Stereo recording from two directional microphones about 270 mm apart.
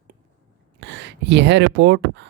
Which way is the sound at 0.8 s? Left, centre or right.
Right.